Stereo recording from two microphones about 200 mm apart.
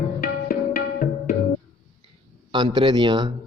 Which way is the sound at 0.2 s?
45° left (ahead or behind).